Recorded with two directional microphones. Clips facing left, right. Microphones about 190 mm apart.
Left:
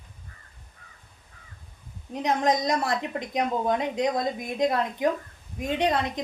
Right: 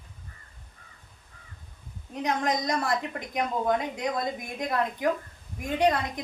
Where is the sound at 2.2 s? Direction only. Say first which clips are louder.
Left 3 dB; 20° left (ahead or behind).